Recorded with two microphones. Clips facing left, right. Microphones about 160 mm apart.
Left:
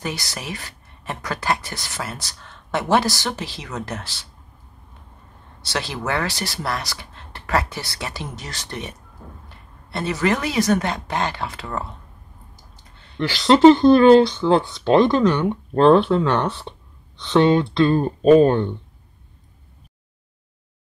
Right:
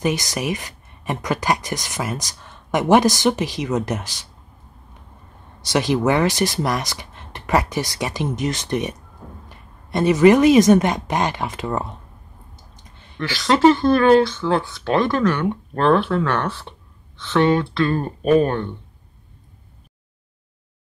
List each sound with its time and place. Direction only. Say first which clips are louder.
0.0 s speech: right 8 dB; 20° right (ahead or behind)
5.6 s speech: right 9 dB; 15° right (ahead or behind)
13.4 s speech: left 4 dB; 20° left (ahead or behind)